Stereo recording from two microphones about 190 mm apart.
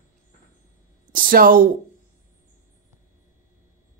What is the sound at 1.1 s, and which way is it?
Speech, 50° right (ahead or behind).